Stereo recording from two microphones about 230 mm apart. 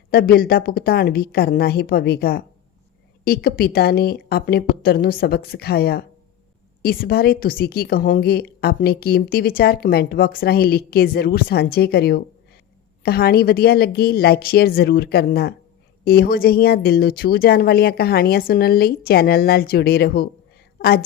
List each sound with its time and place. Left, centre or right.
0.1 s a woman's voice: left